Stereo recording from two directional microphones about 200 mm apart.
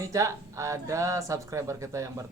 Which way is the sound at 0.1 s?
15° right (ahead or behind).